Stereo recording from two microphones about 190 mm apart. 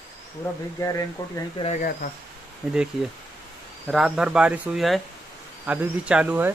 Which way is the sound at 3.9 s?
Centre (ahead or behind).